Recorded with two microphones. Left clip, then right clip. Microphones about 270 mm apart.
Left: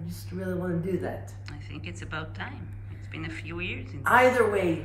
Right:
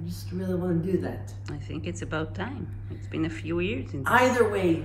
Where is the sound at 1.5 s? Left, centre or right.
Centre.